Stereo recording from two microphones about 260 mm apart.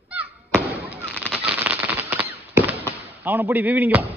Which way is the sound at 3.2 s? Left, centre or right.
Centre.